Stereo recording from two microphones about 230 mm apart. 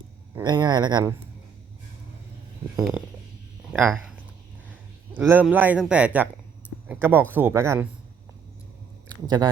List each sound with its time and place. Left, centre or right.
0.3 s speech: centre
3.7 s speech: centre
5.1 s a man's voice: centre
9.2 s a man's voice: centre